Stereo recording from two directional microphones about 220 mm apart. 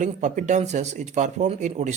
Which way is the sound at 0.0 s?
35° right (ahead or behind).